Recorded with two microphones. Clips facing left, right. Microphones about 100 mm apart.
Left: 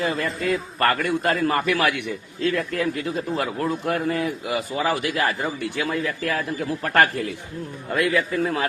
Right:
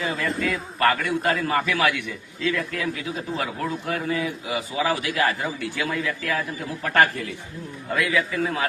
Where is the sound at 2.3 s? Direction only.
45° left (ahead or behind).